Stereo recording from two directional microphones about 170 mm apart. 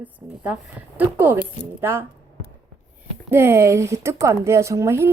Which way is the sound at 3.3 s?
15° right (ahead or behind).